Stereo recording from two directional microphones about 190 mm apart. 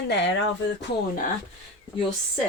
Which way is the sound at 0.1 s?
70° left (ahead or behind).